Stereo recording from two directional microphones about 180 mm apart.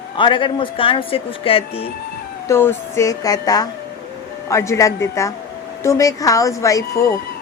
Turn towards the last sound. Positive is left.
turn(degrees=20)  # may be behind; listen again after turning